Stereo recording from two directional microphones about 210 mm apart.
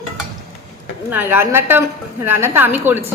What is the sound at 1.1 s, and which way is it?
A woman's voice, 10° right (ahead or behind).